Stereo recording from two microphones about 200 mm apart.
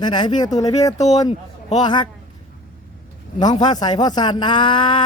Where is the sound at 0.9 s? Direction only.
35° left (ahead or behind).